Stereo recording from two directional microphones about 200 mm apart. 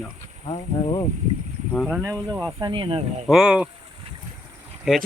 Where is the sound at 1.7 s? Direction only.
5° right (ahead or behind).